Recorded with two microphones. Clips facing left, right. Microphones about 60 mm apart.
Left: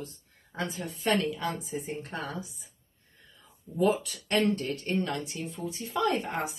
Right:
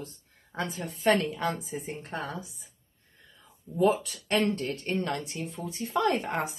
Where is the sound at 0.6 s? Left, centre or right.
Right.